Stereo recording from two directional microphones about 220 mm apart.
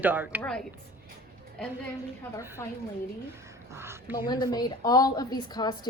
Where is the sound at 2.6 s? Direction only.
10° left (ahead or behind).